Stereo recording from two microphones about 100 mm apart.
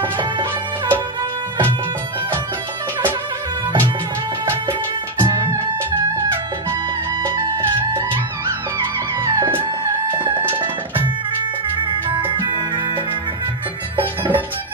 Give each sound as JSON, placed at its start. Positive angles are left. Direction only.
{"t": 0.2, "sound": "music", "side_deg": -50}
{"t": 8.7, "sound": "music", "side_deg": -35}